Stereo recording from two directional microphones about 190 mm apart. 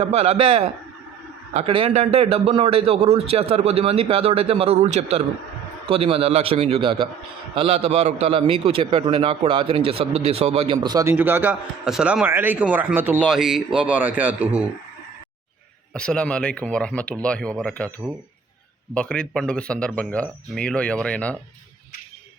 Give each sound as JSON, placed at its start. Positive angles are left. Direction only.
{"t": 0.0, "sound": "a man's voice", "side_deg": -35}
{"t": 10.8, "sound": "a man's voice", "side_deg": -15}
{"t": 15.9, "sound": "speech", "side_deg": 5}
{"t": 18.9, "sound": "speech", "side_deg": 5}